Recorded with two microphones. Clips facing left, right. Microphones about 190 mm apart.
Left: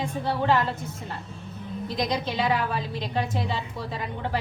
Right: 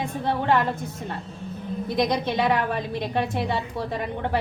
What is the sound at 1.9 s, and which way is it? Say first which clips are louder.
A woman's voice: right 4 dB; 60° right (ahead or behind).